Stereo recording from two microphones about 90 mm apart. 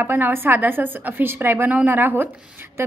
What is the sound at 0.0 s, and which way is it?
A woman's voice, 25° right (ahead or behind).